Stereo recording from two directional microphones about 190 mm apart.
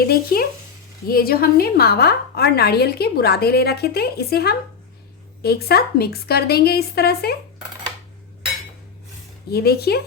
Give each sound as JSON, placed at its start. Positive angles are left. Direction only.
{"t": 0.0, "sound": "a woman's voice", "side_deg": 55}
{"t": 9.5, "sound": "a woman's voice", "side_deg": 55}